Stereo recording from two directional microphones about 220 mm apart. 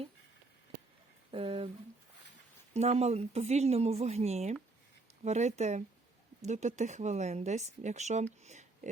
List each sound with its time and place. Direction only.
1.3 s speech: 25° right (ahead or behind)
2.7 s speech: 30° right (ahead or behind)